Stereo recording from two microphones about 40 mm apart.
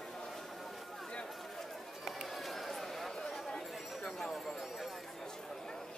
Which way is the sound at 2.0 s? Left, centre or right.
Centre.